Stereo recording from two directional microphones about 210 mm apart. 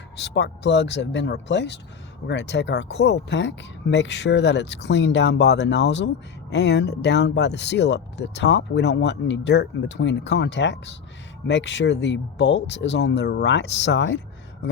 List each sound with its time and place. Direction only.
0.2 s speech: 55° left (ahead or behind)